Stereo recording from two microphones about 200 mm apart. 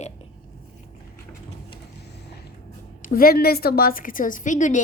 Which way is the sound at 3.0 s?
45° left (ahead or behind).